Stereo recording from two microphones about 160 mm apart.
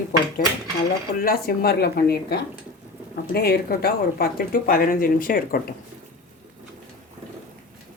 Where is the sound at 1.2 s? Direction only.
70° left (ahead or behind).